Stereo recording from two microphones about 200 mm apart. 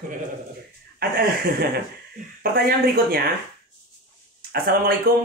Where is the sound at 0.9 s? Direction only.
50° right (ahead or behind).